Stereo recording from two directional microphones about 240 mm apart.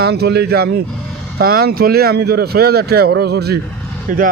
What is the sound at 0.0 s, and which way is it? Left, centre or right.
A man's voice, right.